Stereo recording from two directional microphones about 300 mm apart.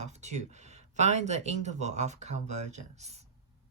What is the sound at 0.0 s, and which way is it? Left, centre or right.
Speech, right.